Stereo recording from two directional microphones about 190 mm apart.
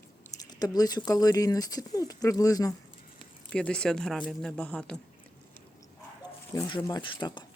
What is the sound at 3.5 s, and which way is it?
Speech, 5° left (ahead or behind).